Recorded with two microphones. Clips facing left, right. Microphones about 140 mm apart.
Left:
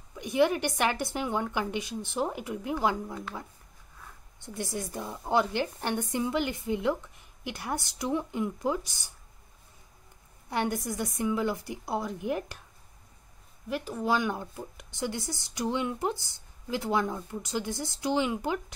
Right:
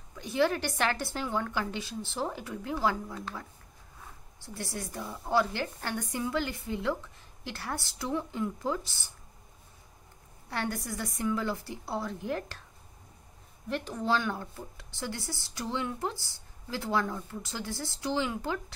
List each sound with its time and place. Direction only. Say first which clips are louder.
0.1 s a woman's voice: left 3 dB; 15° left (ahead or behind)
10.5 s speech: left 4 dB; 20° left (ahead or behind)
13.7 s speech: left 1 dB; 5° left (ahead or behind)